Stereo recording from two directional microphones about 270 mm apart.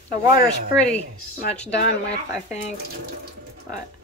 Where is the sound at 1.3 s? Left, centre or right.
Left.